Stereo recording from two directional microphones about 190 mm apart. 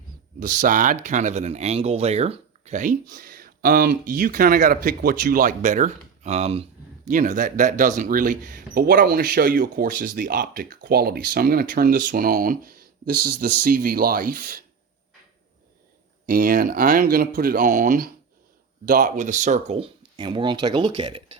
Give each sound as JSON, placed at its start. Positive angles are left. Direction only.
{"t": 0.4, "sound": "speech", "side_deg": -45}
{"t": 16.2, "sound": "speech", "side_deg": -45}